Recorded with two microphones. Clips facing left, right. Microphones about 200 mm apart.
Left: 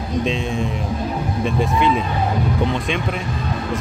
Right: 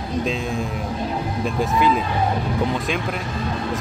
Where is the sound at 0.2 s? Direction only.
Centre (ahead or behind).